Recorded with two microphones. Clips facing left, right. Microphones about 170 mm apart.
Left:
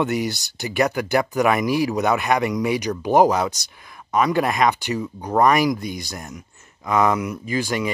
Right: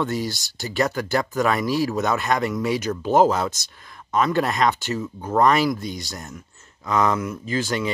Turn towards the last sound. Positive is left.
turn(degrees=10)  # may be behind; listen again after turning